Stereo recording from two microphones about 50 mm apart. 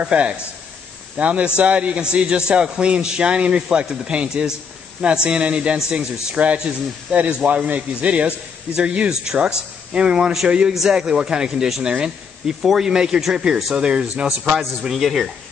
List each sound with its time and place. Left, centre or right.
0.0 s a man's voice: right
14.8 s a man's voice: centre